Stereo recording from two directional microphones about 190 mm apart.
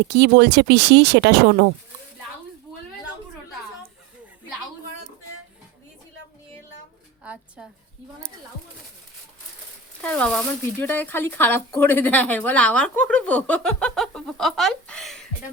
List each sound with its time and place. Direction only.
0.1 s speech: 65° right (ahead or behind)
7.3 s a sound: 5° right (ahead or behind)
10.0 s speech: 5° left (ahead or behind)